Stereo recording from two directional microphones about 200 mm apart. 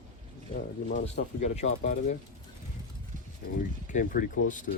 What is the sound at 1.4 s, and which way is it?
Speech, 35° left (ahead or behind).